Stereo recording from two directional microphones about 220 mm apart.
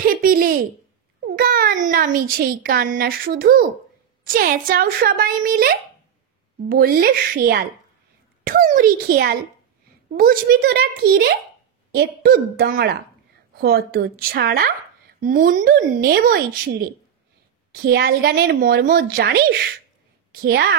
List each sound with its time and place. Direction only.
0.0 s a child's voice: 40° right (ahead or behind)
17.8 s a woman's voice: 45° right (ahead or behind)